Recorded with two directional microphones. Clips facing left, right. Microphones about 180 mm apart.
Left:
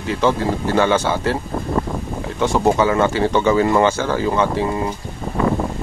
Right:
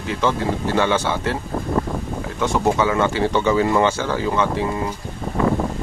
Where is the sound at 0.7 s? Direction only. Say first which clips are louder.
Left 3 dB; 45° left (ahead or behind).